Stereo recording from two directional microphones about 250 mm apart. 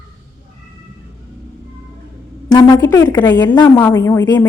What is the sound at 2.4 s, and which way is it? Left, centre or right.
A woman's voice, centre.